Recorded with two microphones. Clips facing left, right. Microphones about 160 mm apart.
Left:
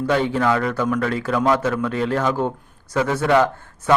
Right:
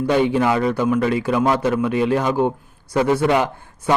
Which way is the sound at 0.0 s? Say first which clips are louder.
Right 2 dB; 15° right (ahead or behind).